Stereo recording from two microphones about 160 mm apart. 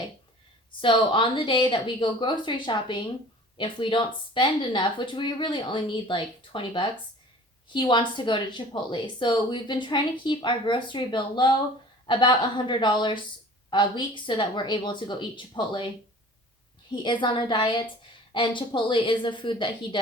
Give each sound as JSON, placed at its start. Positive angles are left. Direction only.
{"t": 0.8, "sound": "a woman's voice", "side_deg": 30}
{"t": 17.0, "sound": "a woman's voice", "side_deg": 30}